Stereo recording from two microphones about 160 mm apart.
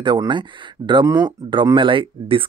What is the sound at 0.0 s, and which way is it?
Speech, 30° right (ahead or behind).